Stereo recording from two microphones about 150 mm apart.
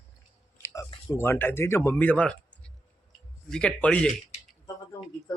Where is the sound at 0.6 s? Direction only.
20° left (ahead or behind).